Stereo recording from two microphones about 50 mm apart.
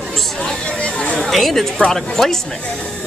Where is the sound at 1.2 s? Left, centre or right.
Centre.